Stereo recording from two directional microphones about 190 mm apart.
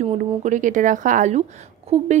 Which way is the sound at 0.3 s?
40° right (ahead or behind).